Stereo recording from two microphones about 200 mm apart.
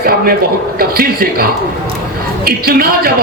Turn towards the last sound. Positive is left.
turn(degrees=-50)  # may be behind; listen again after turning